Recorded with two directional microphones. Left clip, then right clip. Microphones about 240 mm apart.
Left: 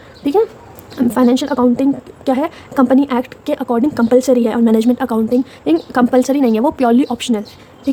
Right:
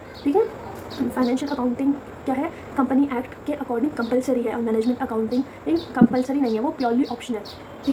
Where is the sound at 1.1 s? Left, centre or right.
Left.